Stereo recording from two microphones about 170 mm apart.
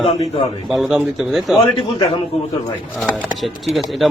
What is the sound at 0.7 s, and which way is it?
Speech, centre (ahead or behind).